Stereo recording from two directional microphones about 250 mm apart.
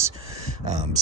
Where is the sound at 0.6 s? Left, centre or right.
Right.